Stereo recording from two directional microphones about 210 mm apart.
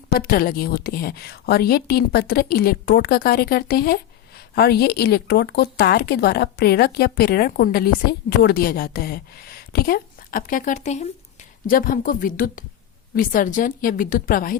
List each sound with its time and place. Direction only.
0.1 s a woman's voice: 45° left (ahead or behind)